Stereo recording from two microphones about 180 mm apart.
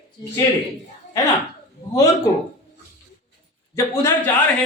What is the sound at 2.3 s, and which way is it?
Speech, 20° left (ahead or behind).